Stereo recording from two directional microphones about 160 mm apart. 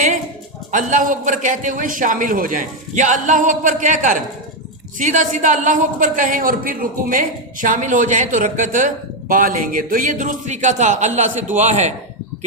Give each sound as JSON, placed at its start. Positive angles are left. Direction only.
{"t": 0.7, "sound": "a man's voice", "side_deg": -55}